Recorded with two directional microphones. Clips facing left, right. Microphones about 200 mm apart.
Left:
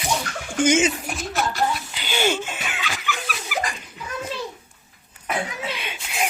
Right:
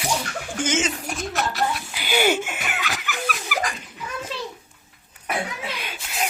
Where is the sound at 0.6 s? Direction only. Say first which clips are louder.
Left 6 dB; 10° left (ahead or behind).